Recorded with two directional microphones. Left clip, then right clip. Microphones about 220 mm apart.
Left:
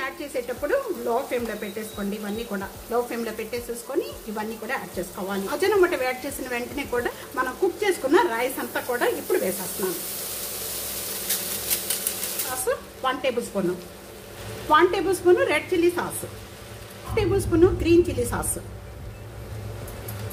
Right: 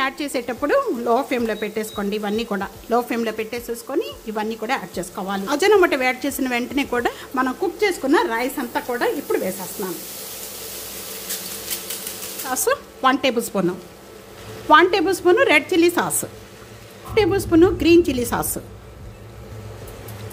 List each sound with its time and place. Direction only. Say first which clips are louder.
0.0 s a woman's voice: right 6 dB; 50° right (ahead or behind)
12.6 s speech: right 7 dB; 50° right (ahead or behind)
14.7 s speech: right 5 dB; 40° right (ahead or behind)
17.1 s a woman's voice: right 6 dB; 40° right (ahead or behind)